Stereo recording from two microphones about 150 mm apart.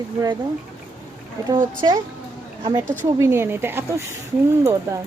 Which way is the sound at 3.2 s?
15° right (ahead or behind).